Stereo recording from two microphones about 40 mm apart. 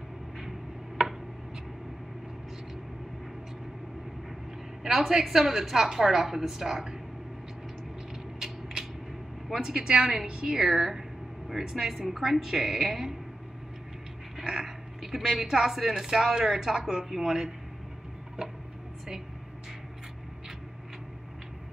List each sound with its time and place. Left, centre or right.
0.4 s a sound: centre
4.8 s a woman's voice: centre
9.5 s a woman's voice: centre
10.5 s a woman's voice: centre
11.9 s a woman's voice: centre
14.4 s speech: centre